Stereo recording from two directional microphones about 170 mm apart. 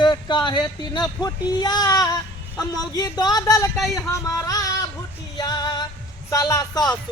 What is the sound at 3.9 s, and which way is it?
Music, 20° left (ahead or behind).